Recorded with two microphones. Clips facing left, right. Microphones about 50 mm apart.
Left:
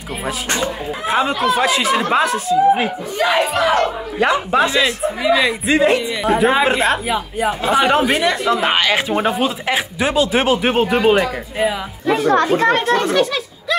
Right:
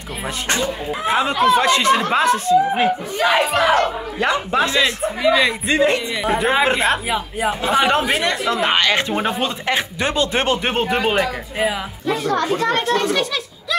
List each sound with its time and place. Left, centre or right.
1.0 s speech: centre
3.5 s battle cry: right
4.2 s speech: centre
12.3 s a child's voice: left
12.9 s speech: centre